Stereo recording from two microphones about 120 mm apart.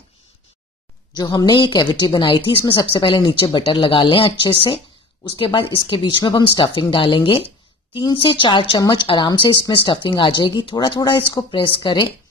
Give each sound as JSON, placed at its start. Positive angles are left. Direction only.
{"t": 1.1, "sound": "speech", "side_deg": 35}